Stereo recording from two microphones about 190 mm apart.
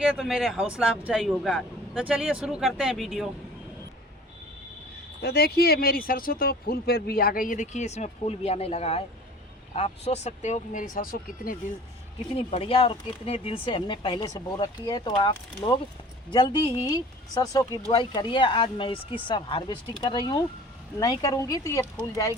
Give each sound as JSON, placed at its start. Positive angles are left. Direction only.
{"t": 0.0, "sound": "speech", "side_deg": -5}
{"t": 5.2, "sound": "speech", "side_deg": 55}
{"t": 12.3, "sound": "speech", "side_deg": 30}